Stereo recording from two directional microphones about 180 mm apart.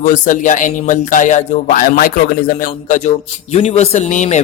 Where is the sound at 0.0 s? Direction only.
45° left (ahead or behind).